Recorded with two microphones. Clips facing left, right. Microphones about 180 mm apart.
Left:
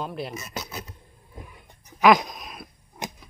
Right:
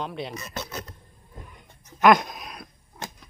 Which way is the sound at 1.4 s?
10° left (ahead or behind).